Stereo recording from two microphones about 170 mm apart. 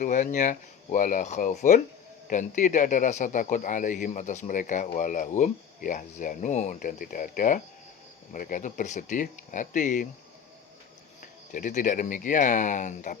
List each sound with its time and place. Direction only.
0.0 s a man's voice: 50° left (ahead or behind)
11.2 s a man's voice: 50° left (ahead or behind)